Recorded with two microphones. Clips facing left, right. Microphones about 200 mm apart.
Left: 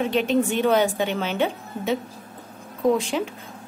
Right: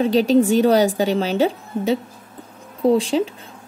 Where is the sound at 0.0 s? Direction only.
35° right (ahead or behind).